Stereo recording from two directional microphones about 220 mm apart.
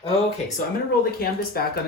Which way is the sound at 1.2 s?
45° left (ahead or behind).